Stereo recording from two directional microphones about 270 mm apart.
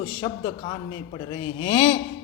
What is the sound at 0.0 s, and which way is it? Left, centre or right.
A man's voice, centre.